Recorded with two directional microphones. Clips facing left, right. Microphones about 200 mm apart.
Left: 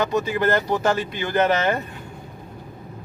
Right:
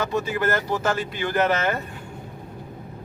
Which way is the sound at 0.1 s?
20° left (ahead or behind).